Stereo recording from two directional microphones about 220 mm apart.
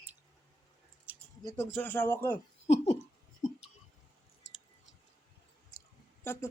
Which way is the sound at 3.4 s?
25° left (ahead or behind).